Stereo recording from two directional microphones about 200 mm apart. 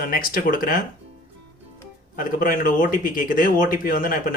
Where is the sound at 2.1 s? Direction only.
45° left (ahead or behind).